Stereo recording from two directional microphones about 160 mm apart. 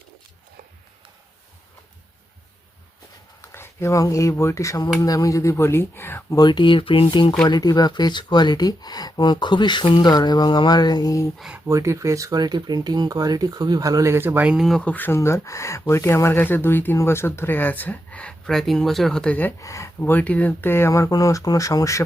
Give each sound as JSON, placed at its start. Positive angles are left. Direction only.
{"t": 3.5, "sound": "speech", "side_deg": 15}
{"t": 6.4, "sound": "speech", "side_deg": 30}
{"t": 11.3, "sound": "speech", "side_deg": -5}
{"t": 11.6, "sound": "speech", "side_deg": -20}